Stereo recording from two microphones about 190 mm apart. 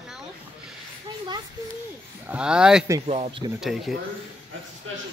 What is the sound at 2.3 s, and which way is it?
Speech, 5° right (ahead or behind).